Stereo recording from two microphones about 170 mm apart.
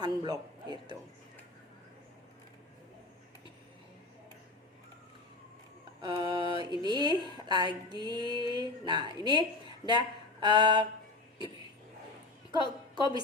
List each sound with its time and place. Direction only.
0.0 s a man's voice: 25° right (ahead or behind)
6.0 s speech: 30° right (ahead or behind)
12.5 s a woman's voice: 25° right (ahead or behind)